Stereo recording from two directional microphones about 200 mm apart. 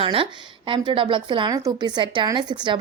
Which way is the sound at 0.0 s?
25° right (ahead or behind).